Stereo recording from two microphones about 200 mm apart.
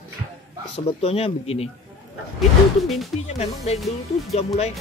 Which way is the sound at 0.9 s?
30° left (ahead or behind).